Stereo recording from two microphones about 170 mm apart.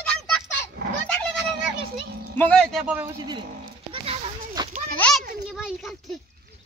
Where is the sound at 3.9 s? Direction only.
30° right (ahead or behind).